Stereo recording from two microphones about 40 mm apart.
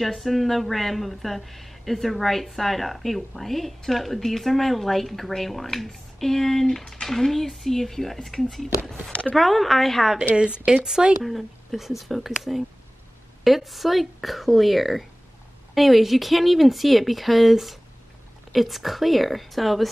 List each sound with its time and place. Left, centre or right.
0.0 s a woman's voice: centre
10.3 s speech: right
11.2 s a woman's voice: centre
13.4 s a woman's voice: centre